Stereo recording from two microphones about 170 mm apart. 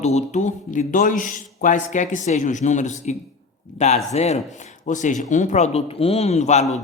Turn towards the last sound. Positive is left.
turn(degrees=40)  # may be behind; listen again after turning